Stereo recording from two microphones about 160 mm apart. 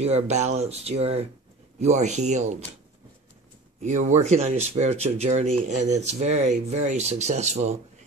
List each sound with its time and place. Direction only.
0.0 s speech: 45° right (ahead or behind)
3.8 s speech: 45° right (ahead or behind)